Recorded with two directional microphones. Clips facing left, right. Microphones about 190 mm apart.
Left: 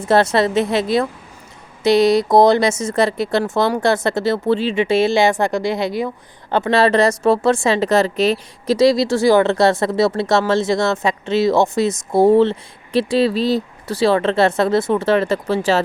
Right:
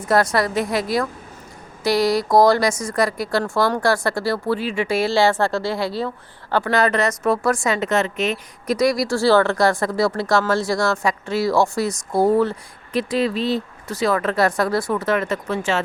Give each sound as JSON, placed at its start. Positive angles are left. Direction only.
{"t": 0.1, "sound": "a woman's voice", "side_deg": 25}